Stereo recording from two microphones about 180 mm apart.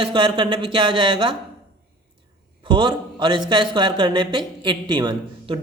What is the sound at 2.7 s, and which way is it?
Speech, 25° right (ahead or behind).